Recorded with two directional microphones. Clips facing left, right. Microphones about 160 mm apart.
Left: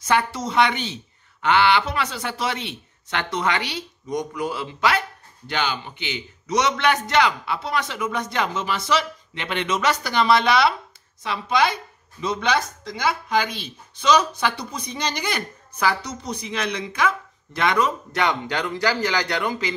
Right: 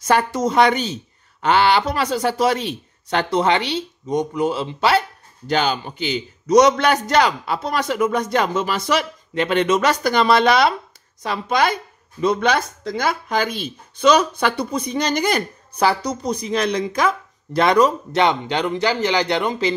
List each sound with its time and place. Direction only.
0.0 s a man's voice: 45° right (ahead or behind); by 5.0 s 30° right (ahead or behind)
5.5 s a man's voice: 40° right (ahead or behind); by 19.7 s 25° right (ahead or behind)